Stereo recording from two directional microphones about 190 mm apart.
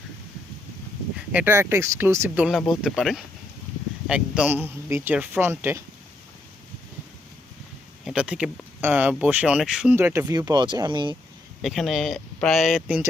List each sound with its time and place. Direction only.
1.3 s speech: 10° right (ahead or behind)
8.0 s speech: 5° right (ahead or behind); by 11.2 s 25° right (ahead or behind)
11.6 s speech: centre (ahead or behind)